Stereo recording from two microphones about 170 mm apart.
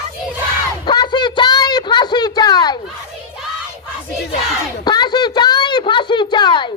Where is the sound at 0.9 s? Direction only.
25° left (ahead or behind).